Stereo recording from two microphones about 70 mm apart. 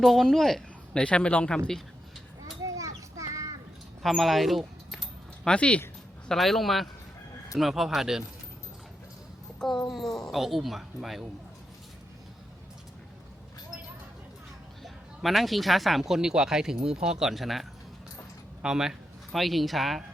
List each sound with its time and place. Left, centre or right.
0.0 s speech: centre
1.0 s speech: centre
2.6 s a sound: right
4.0 s speech: centre
5.5 s speech: centre
6.2 s speech: centre
9.6 s a woman's voice: centre
14.8 s speech: centre